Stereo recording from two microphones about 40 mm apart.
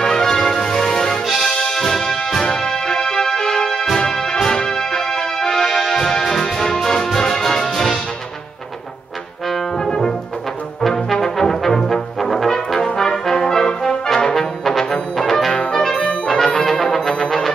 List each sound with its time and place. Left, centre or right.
0.0 s music: centre
9.5 s brass instrument: centre
10.8 s brass instrument: centre
16.0 s brass instrument: left
16.3 s brass instrument: centre